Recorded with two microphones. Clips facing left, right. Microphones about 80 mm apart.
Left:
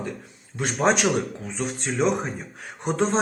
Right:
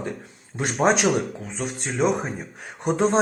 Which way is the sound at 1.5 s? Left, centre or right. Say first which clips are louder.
Left 1 dB; centre.